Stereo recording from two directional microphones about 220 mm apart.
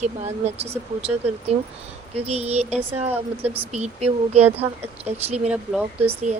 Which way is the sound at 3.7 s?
30° right (ahead or behind).